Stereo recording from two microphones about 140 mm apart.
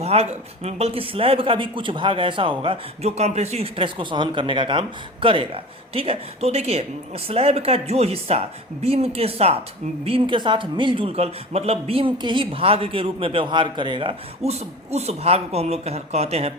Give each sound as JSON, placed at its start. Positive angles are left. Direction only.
{"t": 0.0, "sound": "speech", "side_deg": -50}